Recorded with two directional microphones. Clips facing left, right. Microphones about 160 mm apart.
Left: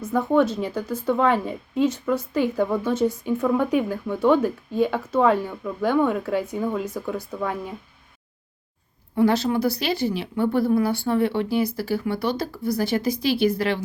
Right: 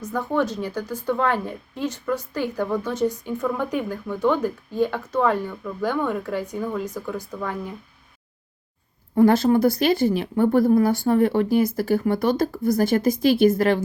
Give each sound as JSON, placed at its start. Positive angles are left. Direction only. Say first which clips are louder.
{"t": 0.0, "sound": "a woman's voice", "louder": "left 4 dB", "side_deg": 5}
{"t": 9.1, "sound": "speech", "louder": "right 4 dB", "side_deg": -50}